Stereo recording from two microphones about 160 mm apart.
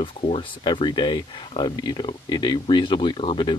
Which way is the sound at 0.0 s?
30° left (ahead or behind).